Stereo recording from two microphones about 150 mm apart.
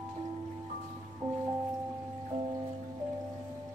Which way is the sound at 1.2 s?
30° right (ahead or behind).